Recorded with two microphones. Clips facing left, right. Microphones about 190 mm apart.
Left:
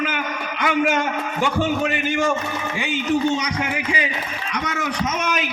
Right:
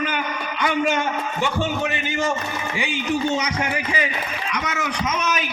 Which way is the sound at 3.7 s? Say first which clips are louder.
Even; 15° left (ahead or behind).